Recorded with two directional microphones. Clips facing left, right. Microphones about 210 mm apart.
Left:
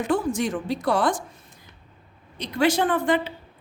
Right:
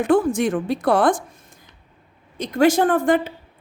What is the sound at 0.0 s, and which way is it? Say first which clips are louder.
A woman's voice: right 6 dB; 55° right (ahead or behind).